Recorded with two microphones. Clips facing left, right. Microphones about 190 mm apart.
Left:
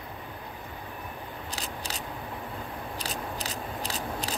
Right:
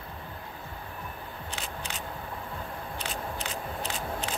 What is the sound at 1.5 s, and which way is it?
Scissors, 35° left (ahead or behind).